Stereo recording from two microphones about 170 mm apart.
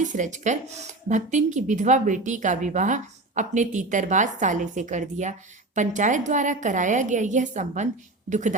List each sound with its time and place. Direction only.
0.0 s speech: 45° right (ahead or behind)